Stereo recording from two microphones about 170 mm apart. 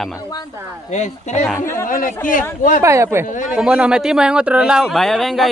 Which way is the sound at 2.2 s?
50° left (ahead or behind).